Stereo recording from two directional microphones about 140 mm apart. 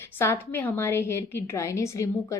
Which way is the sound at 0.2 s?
15° left (ahead or behind).